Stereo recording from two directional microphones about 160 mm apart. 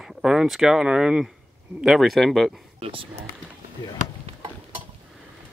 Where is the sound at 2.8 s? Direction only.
35° right (ahead or behind).